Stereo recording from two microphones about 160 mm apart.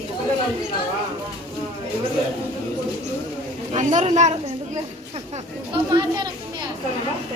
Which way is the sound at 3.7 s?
50° right (ahead or behind).